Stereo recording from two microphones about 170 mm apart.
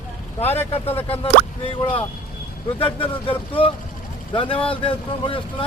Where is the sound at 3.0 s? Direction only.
30° left (ahead or behind).